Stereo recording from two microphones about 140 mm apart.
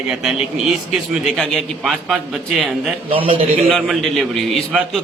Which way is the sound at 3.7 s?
Centre (ahead or behind).